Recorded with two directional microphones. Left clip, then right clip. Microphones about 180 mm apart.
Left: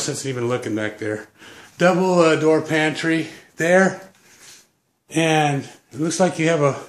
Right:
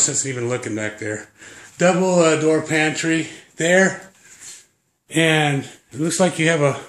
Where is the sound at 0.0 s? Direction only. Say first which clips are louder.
Right 2 dB; centre (ahead or behind).